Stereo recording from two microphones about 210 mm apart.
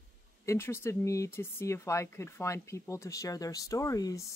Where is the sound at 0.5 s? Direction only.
10° left (ahead or behind).